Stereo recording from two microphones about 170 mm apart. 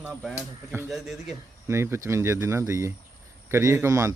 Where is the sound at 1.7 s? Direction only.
15° right (ahead or behind).